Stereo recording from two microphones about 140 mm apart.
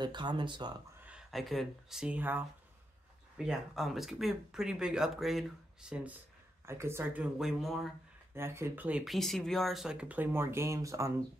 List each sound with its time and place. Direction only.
0.0 s speech: 35° right (ahead or behind)
1.0 s speech: 5° right (ahead or behind)
3.3 s speech: centre (ahead or behind)
6.6 s speech: 20° right (ahead or behind)
7.3 s speech: centre (ahead or behind)
8.4 s speech: 15° right (ahead or behind)